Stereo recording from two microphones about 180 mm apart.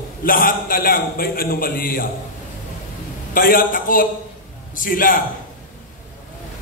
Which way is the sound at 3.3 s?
55° left (ahead or behind).